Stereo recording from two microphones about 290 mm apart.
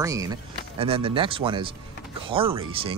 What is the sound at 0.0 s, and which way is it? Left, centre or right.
Speech, centre.